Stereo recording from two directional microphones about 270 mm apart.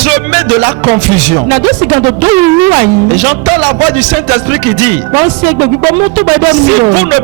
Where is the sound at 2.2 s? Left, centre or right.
Centre.